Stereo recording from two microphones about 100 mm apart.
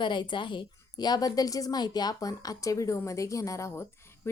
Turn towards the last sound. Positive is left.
turn(degrees=30)  # may be behind; listen again after turning